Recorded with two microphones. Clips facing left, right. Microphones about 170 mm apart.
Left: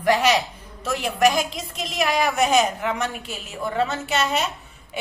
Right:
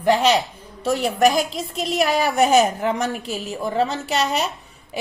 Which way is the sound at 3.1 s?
Centre (ahead or behind).